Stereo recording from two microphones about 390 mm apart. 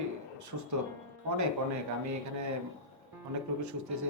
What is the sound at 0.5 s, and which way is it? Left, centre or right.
Speech, right.